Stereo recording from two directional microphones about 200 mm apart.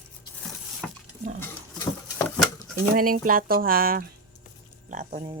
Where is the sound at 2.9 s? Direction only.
45° right (ahead or behind).